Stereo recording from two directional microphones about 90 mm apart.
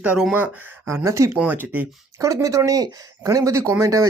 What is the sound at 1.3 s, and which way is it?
Speech, 20° right (ahead or behind).